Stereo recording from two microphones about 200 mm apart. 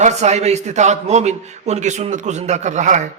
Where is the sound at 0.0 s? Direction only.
35° right (ahead or behind).